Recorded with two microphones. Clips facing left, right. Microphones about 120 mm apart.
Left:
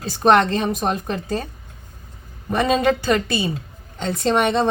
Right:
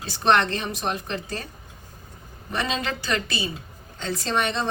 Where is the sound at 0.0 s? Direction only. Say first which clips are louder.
Left 5 dB; 45° left (ahead or behind).